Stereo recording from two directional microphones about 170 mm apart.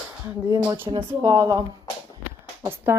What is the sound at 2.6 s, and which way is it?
Speech, 15° right (ahead or behind).